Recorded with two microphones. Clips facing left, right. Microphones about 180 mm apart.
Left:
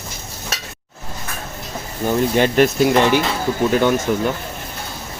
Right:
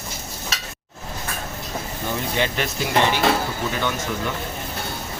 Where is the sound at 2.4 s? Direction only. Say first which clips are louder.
Left 11 dB; 50° left (ahead or behind).